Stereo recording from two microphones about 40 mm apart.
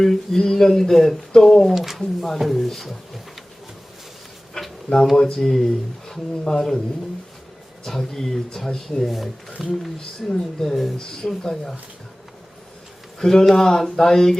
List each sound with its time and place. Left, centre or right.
0.0 s speech: centre
1.7 s speech: centre
4.6 s a sound: centre
5.2 s speech: centre
7.9 s speech: centre
9.0 s speech: centre
10.3 s speech: centre
13.1 s speech: centre